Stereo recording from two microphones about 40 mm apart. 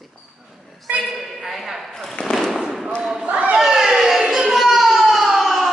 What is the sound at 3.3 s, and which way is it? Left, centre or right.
Crowd, right.